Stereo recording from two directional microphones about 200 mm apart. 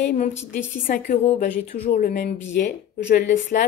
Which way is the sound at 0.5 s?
40° left (ahead or behind).